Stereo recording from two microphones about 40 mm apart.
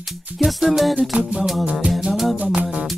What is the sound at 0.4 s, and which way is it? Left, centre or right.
Music, centre.